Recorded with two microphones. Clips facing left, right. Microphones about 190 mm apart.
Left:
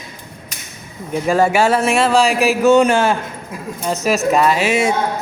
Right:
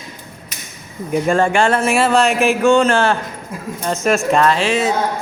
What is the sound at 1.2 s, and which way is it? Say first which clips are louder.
Speech: left 2 dB; 5° left (ahead or behind).